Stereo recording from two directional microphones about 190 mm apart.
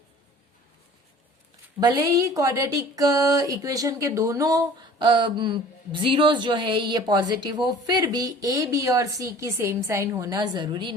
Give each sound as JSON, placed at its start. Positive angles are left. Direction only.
{"t": 1.8, "sound": "speech", "side_deg": -20}